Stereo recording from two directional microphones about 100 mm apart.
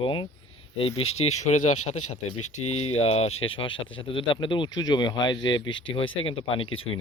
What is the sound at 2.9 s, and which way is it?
Speech, 90° left.